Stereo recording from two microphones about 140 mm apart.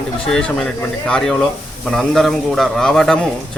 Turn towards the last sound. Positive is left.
turn(degrees=5)  # may be behind; listen again after turning